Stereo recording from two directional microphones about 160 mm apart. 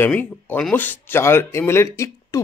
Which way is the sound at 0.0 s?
10° left (ahead or behind).